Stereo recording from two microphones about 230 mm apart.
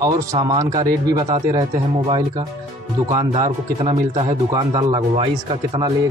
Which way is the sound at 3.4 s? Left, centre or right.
Right.